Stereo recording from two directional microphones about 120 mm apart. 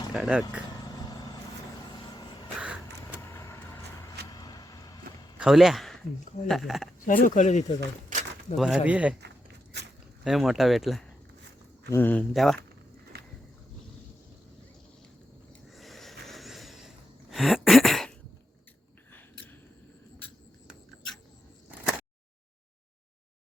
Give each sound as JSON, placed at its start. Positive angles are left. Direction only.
{"t": 0.1, "sound": "speech", "side_deg": -5}
{"t": 0.7, "sound": "vehicle", "side_deg": 35}
{"t": 2.6, "sound": "a sound", "side_deg": -10}
{"t": 3.2, "sound": "vehicle", "side_deg": 25}
{"t": 5.4, "sound": "a man's voice", "side_deg": -5}
{"t": 7.0, "sound": "speech", "side_deg": 90}
{"t": 8.1, "sound": "a sound", "side_deg": -90}
{"t": 8.5, "sound": "speech", "side_deg": -5}
{"t": 10.2, "sound": "speech", "side_deg": -5}
{"t": 11.9, "sound": "speech", "side_deg": 15}
{"t": 12.3, "sound": "speech", "side_deg": 0}
{"t": 15.7, "sound": "a sound", "side_deg": 0}